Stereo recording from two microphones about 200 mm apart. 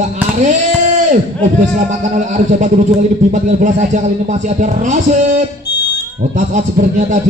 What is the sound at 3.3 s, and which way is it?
Speech, 40° right (ahead or behind).